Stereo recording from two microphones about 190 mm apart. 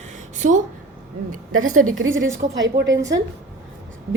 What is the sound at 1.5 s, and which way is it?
A woman's voice, 90° right.